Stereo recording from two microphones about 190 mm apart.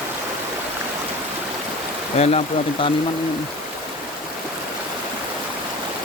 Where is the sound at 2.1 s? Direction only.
35° left (ahead or behind).